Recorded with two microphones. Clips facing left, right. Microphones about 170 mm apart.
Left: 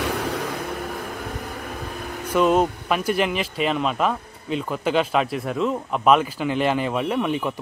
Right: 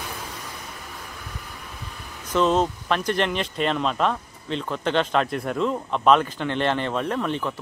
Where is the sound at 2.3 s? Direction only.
10° left (ahead or behind).